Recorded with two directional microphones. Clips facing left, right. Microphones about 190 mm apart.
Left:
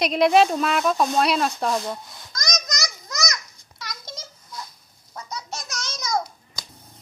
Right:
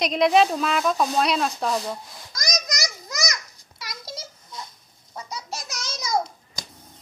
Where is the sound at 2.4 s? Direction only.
35° right (ahead or behind).